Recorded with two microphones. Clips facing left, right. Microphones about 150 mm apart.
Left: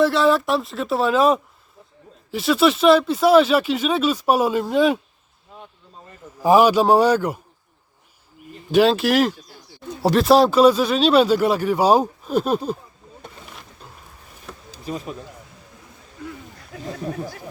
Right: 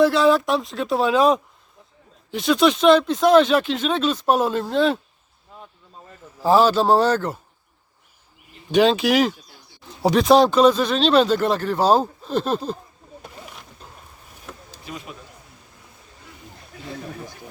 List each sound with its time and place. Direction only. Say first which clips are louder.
0.0 s speech: right 1 dB; centre (ahead or behind)
6.4 s speech: left 2 dB; 15° left (ahead or behind)
8.7 s speech: left 1 dB; centre (ahead or behind)
13.2 s a sound: even; centre (ahead or behind)
14.5 s bee: even; centre (ahead or behind)
14.8 s speech: left 7 dB; 35° left (ahead or behind)